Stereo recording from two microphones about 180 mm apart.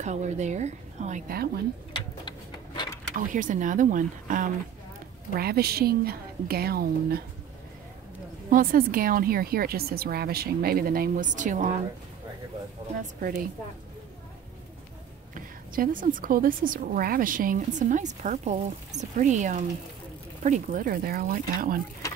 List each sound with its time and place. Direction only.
0.0 s a woman's voice: 40° right (ahead or behind); by 1.6 s 55° right (ahead or behind)
2.0 s a sound: 25° left (ahead or behind)
3.2 s a woman's voice: 45° right (ahead or behind)
5.3 s speech: 60° right (ahead or behind)
8.5 s speech: 50° right (ahead or behind)
13.2 s a woman's voice: 50° right (ahead or behind)
15.3 s a woman's voice: 50° right (ahead or behind)